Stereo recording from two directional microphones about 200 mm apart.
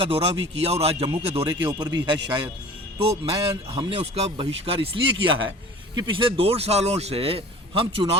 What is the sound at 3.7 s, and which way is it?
Speech, 25° right (ahead or behind).